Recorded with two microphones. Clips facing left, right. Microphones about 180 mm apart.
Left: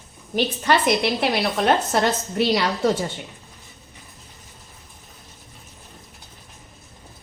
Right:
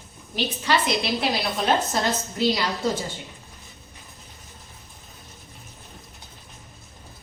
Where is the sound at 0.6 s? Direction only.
55° left (ahead or behind).